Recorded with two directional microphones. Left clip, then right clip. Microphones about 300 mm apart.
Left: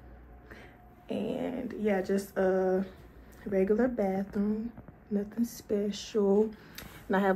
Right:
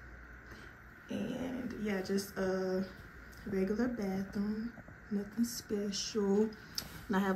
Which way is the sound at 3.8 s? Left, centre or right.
Left.